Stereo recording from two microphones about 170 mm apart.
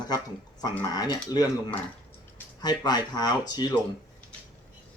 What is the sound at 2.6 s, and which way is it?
Speech, 25° left (ahead or behind).